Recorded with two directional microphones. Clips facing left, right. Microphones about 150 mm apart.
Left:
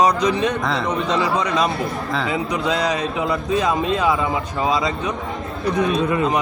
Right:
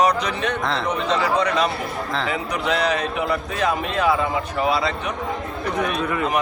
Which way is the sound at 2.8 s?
20° left (ahead or behind).